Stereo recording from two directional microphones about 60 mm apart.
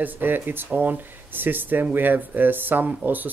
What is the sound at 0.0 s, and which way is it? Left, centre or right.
Speech, right.